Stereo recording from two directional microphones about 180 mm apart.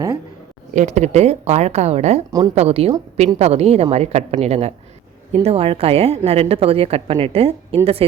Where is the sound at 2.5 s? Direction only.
35° right (ahead or behind).